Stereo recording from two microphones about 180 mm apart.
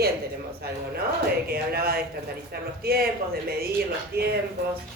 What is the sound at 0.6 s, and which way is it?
Speech, 60° right (ahead or behind).